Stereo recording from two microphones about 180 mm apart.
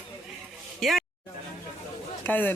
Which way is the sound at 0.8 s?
Centre (ahead or behind).